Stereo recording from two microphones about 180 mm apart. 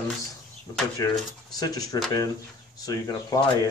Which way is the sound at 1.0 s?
20° left (ahead or behind).